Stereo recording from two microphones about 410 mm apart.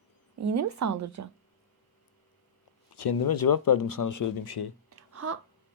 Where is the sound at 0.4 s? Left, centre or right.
Right.